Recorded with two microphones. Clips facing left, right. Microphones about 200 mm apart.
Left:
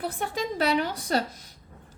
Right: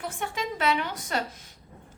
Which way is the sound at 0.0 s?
35° left (ahead or behind).